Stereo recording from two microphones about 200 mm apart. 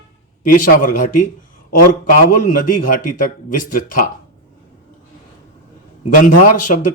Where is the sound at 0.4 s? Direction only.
45° left (ahead or behind).